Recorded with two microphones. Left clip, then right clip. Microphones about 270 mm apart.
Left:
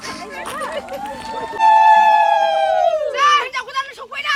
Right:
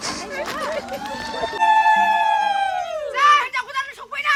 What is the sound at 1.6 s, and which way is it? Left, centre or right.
Music, centre.